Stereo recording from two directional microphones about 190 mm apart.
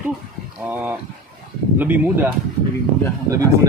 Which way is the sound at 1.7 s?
10° right (ahead or behind).